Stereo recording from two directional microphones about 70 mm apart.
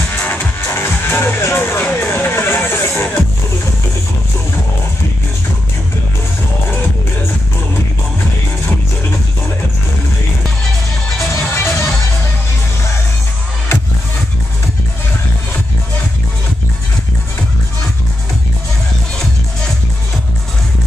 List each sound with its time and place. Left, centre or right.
0.1 s music: left
11.3 s music: left